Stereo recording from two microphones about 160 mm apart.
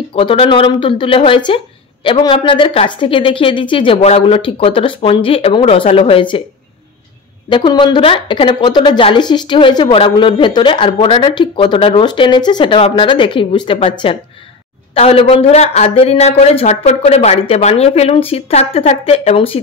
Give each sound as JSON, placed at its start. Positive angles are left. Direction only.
{"t": 0.1, "sound": "speech", "side_deg": 35}
{"t": 7.4, "sound": "speech", "side_deg": 30}